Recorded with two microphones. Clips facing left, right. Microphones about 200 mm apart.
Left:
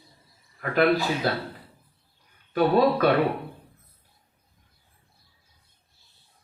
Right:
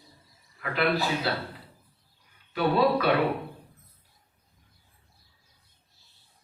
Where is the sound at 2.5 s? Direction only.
45° left (ahead or behind).